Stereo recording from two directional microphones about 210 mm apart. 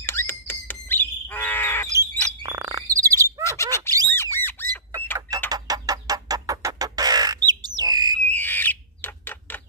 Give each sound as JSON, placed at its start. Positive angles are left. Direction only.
{"t": 0.0, "sound": "a sound", "side_deg": 10}
{"t": 1.9, "sound": "bird", "side_deg": -15}
{"t": 3.4, "sound": "bird", "side_deg": 15}
{"t": 4.1, "sound": "squawk", "side_deg": 10}
{"t": 5.5, "sound": "music", "side_deg": -15}
{"t": 8.3, "sound": "a sound", "side_deg": 10}